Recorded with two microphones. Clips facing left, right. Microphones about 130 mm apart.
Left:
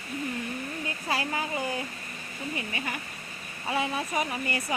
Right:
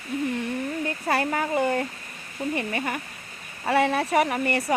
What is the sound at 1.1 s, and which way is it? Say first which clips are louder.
Speech: right 6 dB; 55° right (ahead or behind).